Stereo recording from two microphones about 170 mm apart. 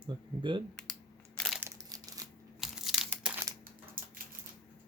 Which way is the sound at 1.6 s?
15° right (ahead or behind).